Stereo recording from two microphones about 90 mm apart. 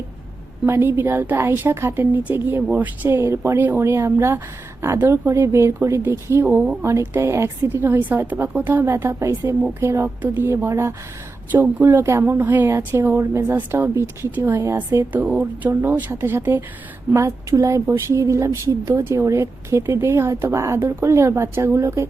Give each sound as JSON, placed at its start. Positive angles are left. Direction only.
{"t": 0.6, "sound": "a woman's voice", "side_deg": -25}
{"t": 14.5, "sound": "speech", "side_deg": -35}
{"t": 15.1, "sound": "a woman's voice", "side_deg": -20}